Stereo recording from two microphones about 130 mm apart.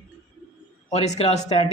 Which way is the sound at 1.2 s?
60° left (ahead or behind).